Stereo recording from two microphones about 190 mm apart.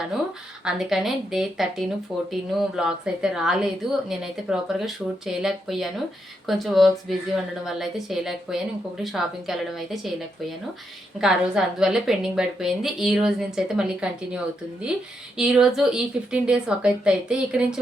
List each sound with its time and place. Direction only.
0.6 s a woman's voice: centre (ahead or behind)